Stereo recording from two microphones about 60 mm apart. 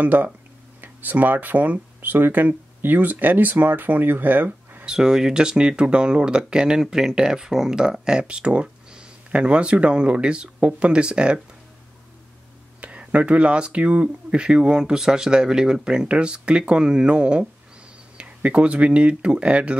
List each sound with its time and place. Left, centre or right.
0.0 s speech: right
4.8 s speech: centre
12.8 s speech: right